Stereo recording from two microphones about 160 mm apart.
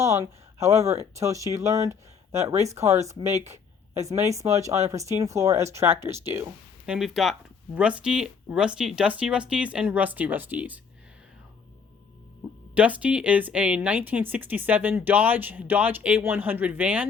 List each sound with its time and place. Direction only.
0.0 s speech: 20° right (ahead or behind)
12.7 s speech: 10° right (ahead or behind)